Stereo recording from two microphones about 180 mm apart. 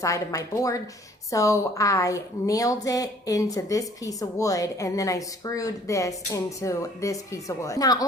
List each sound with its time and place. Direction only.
0.0 s a woman's voice: 20° left (ahead or behind)